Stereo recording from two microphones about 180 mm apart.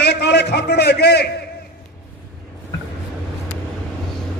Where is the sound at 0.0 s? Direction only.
70° left (ahead or behind).